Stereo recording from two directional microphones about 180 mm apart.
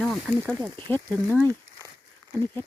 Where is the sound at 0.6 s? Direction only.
25° right (ahead or behind).